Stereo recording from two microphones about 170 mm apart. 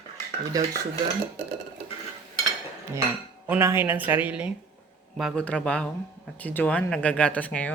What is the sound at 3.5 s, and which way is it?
Speech, 15° right (ahead or behind).